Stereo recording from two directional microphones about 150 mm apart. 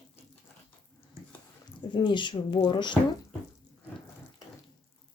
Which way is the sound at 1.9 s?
30° left (ahead or behind).